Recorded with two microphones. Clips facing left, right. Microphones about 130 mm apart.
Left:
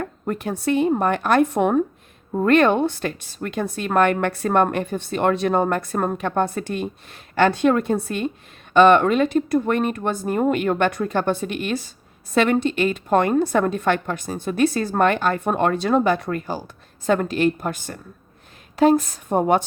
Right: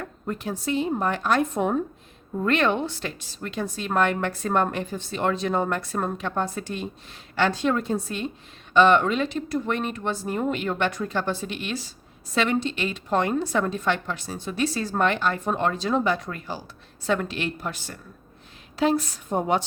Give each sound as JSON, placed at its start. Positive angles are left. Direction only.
{"t": 0.0, "sound": "a woman's voice", "side_deg": 55}
{"t": 2.3, "sound": "a woman's voice", "side_deg": 50}